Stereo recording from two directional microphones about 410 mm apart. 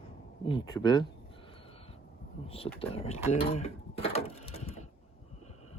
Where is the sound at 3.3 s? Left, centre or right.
Centre.